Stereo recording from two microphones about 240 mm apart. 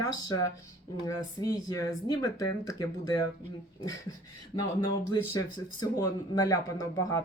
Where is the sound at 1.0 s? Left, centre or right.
Centre.